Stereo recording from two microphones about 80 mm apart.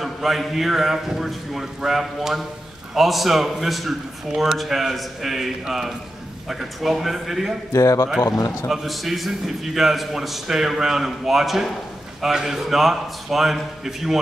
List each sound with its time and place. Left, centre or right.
0.0 s a man's voice: centre
7.7 s a man's voice: left
8.6 s a man's voice: centre